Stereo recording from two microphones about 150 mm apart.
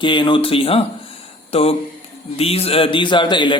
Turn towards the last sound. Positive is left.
turn(degrees=30)  # may be behind; listen again after turning